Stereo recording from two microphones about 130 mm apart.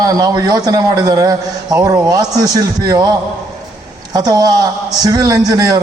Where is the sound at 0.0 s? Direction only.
30° right (ahead or behind).